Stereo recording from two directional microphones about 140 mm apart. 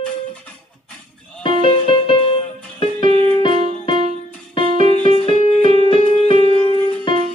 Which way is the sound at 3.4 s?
40° left (ahead or behind).